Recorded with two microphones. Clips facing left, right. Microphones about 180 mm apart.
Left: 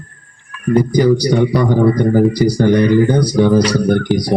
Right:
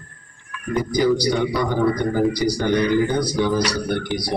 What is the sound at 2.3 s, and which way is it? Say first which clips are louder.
Speech: left 7 dB; 45° left (ahead or behind).